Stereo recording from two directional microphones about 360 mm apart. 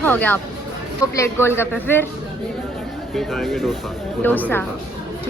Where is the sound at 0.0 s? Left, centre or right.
Centre.